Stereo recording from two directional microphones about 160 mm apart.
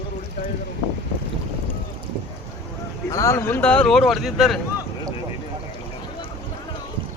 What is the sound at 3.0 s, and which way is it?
Speech, 20° left (ahead or behind).